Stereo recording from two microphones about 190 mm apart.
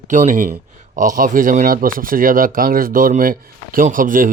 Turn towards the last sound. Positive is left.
turn(degrees=-45)  # may be behind; listen again after turning